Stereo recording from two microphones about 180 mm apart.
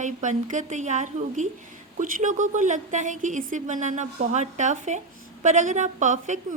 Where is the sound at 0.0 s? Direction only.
45° right (ahead or behind).